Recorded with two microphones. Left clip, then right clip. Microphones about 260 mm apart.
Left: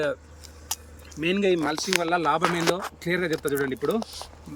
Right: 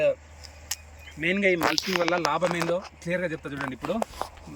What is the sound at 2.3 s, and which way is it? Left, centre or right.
Speech, centre.